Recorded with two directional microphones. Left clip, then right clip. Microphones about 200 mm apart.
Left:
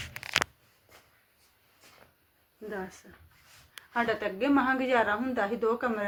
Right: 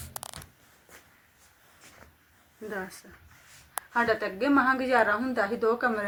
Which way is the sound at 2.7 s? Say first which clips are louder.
Right 2 dB; centre (ahead or behind).